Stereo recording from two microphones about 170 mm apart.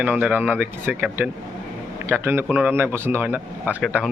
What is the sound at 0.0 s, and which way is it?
A man's voice, 10° right (ahead or behind).